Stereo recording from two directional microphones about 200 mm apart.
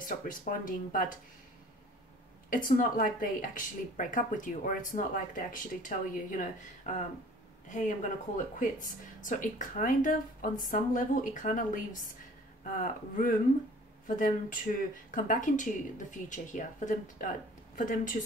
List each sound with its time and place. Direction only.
0.0 s speech: 40° left (ahead or behind)
2.5 s a woman's voice: 45° left (ahead or behind)
9.2 s a woman's voice: 40° left (ahead or behind)